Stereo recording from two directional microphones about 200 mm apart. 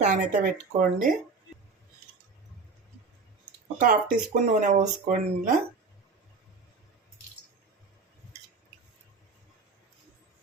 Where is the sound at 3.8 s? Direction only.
40° right (ahead or behind).